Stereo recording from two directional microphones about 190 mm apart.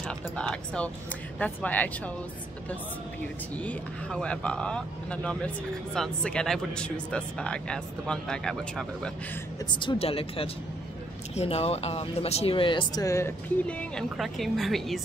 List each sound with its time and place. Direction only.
0.4 s speech: 5° left (ahead or behind)
3.5 s speech: 5° left (ahead or behind)
9.7 s speech: 25° left (ahead or behind); by 15.0 s centre (ahead or behind)